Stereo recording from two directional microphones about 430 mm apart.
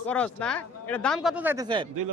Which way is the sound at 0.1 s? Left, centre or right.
Centre.